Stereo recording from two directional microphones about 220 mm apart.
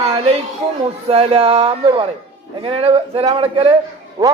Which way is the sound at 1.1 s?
25° right (ahead or behind).